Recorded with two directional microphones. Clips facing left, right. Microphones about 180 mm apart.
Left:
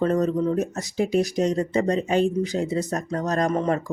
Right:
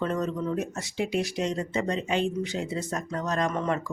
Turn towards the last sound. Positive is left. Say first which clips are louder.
# left 5 dB
turn(degrees=35)  # may be behind; listen again after turning